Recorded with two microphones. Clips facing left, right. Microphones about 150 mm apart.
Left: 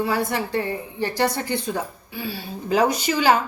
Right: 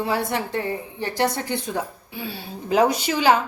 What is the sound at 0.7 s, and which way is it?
A woman's voice, 10° right (ahead or behind).